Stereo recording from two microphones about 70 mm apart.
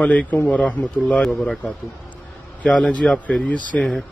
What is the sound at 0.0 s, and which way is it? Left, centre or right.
Speech, left.